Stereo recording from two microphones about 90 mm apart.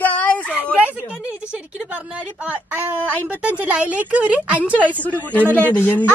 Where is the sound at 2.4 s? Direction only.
15° right (ahead or behind).